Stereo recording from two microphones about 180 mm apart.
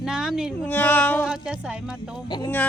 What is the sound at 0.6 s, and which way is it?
Speech, 10° left (ahead or behind).